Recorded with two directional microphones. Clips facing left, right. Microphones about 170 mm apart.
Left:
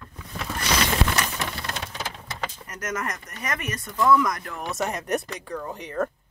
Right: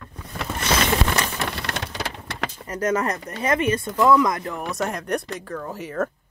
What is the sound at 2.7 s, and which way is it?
Speech, 30° right (ahead or behind).